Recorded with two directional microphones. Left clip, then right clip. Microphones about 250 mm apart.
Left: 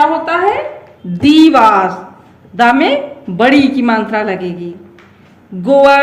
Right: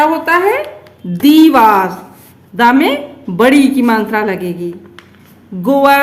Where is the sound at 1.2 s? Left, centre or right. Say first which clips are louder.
Even; centre.